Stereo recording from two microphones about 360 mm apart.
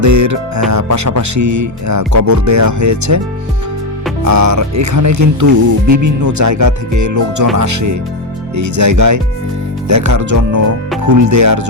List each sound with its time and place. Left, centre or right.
0.0 s music: right
4.2 s music: right